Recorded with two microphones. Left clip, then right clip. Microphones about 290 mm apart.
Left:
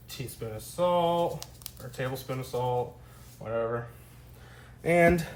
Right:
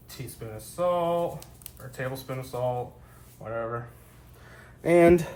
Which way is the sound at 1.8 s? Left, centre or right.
Centre.